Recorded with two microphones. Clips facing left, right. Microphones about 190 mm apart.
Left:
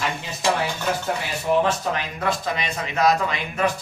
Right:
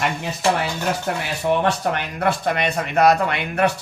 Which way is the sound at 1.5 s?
60° right (ahead or behind).